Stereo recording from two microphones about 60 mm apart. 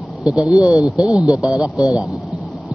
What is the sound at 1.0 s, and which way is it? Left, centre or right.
Speech, left.